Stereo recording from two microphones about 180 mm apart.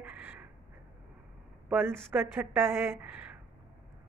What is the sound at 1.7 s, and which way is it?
Speech, 10° right (ahead or behind).